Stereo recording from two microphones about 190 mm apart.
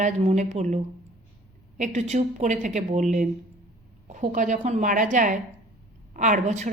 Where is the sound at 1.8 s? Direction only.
35° right (ahead or behind).